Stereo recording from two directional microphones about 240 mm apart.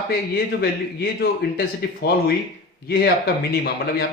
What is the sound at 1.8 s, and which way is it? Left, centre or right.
Speech, left.